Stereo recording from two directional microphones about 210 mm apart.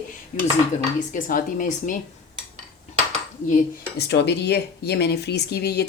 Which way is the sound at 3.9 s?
55° left (ahead or behind).